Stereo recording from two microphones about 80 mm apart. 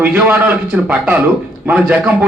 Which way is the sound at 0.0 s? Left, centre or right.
Centre.